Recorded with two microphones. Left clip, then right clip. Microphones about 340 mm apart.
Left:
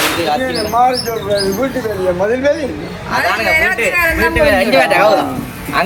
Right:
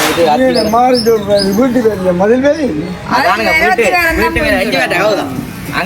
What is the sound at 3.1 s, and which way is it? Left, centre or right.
Speech, centre.